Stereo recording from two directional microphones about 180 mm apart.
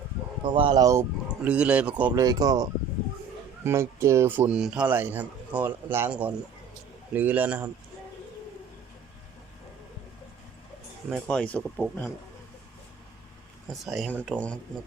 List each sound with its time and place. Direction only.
0.4 s speech: 30° right (ahead or behind)
1.5 s speech: 5° right (ahead or behind)
2.2 s speech: 20° right (ahead or behind)
11.1 s speech: 5° left (ahead or behind)
13.8 s speech: centre (ahead or behind)